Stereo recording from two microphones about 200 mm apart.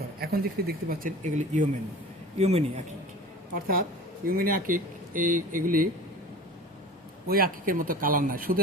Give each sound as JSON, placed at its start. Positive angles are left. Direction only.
{"t": 0.2, "sound": "a man's voice", "side_deg": -50}
{"t": 3.5, "sound": "speech", "side_deg": -45}
{"t": 7.3, "sound": "speech", "side_deg": -45}